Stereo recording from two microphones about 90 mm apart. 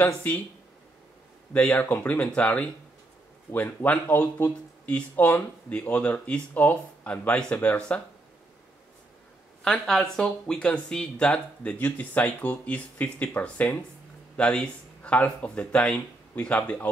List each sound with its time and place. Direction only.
0.0 s speech: 25° left (ahead or behind)
1.5 s speech: 15° left (ahead or behind)
9.6 s speech: 5° left (ahead or behind)